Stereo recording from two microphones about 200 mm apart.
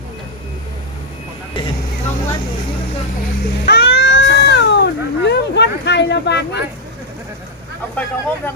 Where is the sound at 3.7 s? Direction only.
55° left (ahead or behind).